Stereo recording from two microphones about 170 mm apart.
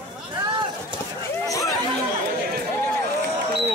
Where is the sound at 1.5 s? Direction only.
20° left (ahead or behind).